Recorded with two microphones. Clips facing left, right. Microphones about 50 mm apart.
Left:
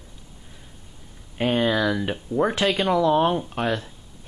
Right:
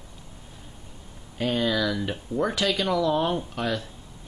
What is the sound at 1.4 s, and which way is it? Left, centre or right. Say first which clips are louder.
Speech: left 3 dB; left.